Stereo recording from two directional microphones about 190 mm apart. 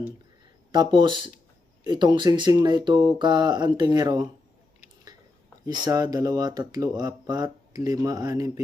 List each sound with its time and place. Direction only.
0.7 s speech: 25° right (ahead or behind)
5.6 s speech: 20° right (ahead or behind)